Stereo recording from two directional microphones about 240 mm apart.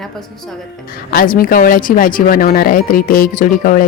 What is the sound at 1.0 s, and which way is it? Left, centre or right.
Speech, left.